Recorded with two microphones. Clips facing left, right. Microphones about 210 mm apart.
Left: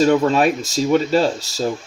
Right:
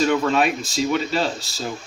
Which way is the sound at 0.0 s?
40° left (ahead or behind).